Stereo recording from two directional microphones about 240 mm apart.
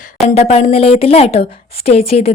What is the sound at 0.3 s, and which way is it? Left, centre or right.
Speech, left.